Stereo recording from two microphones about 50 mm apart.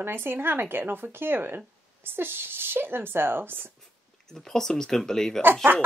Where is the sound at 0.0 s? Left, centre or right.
Right.